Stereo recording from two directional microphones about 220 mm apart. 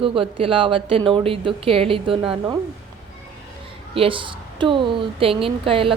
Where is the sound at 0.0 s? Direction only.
25° right (ahead or behind).